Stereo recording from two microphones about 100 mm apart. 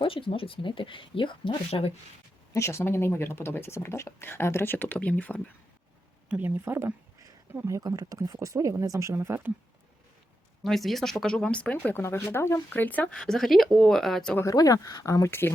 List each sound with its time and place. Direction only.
0.0 s speech: 60° left (ahead or behind)
2.5 s speech: 30° left (ahead or behind)
6.2 s speech: 10° right (ahead or behind)
6.7 s a sound: 25° right (ahead or behind)
7.5 s speech: 30° right (ahead or behind)
10.6 s speech: centre (ahead or behind)
14.4 s speech: 35° left (ahead or behind)